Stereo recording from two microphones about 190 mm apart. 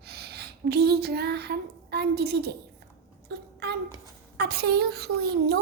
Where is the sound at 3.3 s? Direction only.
60° right (ahead or behind).